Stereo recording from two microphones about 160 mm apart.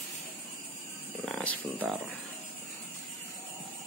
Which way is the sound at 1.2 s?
10° left (ahead or behind).